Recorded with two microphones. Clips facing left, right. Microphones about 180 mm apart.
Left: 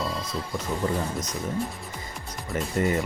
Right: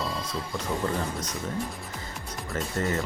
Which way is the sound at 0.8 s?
15° left (ahead or behind).